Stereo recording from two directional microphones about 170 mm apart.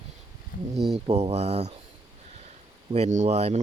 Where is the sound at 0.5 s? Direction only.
65° left (ahead or behind).